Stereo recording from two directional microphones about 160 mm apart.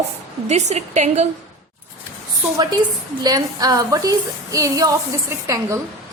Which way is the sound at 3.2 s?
25° right (ahead or behind).